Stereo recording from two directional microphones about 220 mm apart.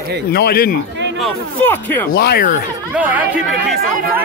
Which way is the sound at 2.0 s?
45° left (ahead or behind).